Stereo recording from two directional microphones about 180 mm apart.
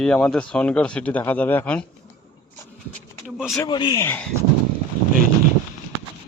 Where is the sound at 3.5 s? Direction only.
25° left (ahead or behind).